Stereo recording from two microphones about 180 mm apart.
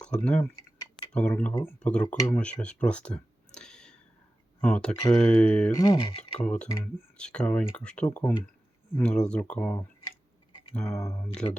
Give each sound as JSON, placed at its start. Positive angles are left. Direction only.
{"t": 0.0, "sound": "speech", "side_deg": 5}
{"t": 5.7, "sound": "speech", "side_deg": 20}
{"t": 6.4, "sound": "speech", "side_deg": 5}
{"t": 10.8, "sound": "speech", "side_deg": 15}